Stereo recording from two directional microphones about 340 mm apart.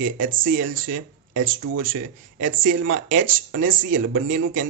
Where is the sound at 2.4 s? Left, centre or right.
Right.